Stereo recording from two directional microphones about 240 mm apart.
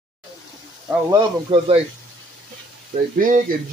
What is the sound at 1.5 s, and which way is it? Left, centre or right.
Speech, centre.